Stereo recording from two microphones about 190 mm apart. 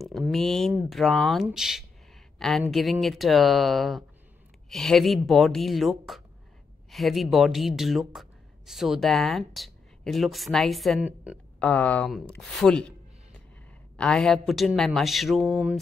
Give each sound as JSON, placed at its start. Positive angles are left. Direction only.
{"t": 0.0, "sound": "a woman's voice", "side_deg": 0}
{"t": 2.3, "sound": "a sound", "side_deg": 0}
{"t": 2.7, "sound": "a woman's voice", "side_deg": 0}